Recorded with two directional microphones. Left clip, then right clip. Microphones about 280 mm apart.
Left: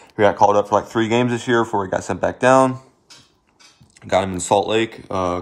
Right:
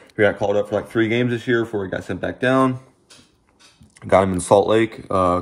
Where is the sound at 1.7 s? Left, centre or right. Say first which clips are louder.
Left 4 dB; left.